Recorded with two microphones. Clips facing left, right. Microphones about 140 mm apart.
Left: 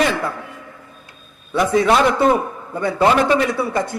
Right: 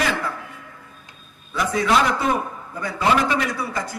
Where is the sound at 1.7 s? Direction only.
25° left (ahead or behind).